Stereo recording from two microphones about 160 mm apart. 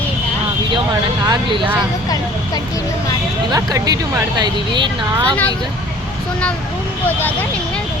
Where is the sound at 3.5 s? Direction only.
20° right (ahead or behind).